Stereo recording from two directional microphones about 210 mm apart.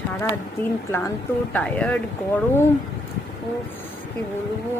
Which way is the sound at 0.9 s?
10° left (ahead or behind).